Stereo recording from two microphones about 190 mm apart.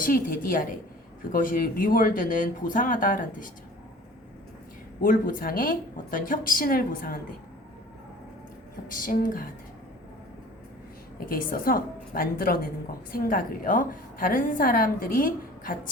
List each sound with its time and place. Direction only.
0.0 s a woman's voice: 45° left (ahead or behind)
5.0 s a woman's voice: 50° left (ahead or behind)
8.9 s a woman's voice: 45° left (ahead or behind)
11.3 s a woman's voice: 50° left (ahead or behind)